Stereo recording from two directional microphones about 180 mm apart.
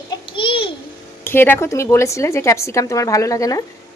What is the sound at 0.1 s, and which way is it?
Babbling, 30° left (ahead or behind).